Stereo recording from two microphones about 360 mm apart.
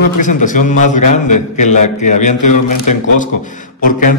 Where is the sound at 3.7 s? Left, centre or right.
Left.